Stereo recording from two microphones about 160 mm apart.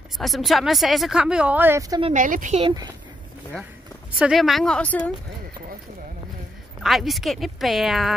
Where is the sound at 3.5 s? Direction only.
5° left (ahead or behind).